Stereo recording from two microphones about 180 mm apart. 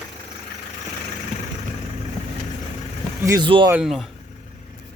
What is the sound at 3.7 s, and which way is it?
Speech, 5° right (ahead or behind).